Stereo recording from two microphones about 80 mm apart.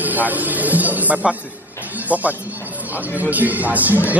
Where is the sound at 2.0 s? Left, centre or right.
Centre.